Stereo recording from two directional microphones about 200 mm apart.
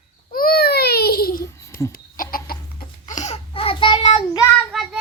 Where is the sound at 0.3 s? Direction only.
45° left (ahead or behind).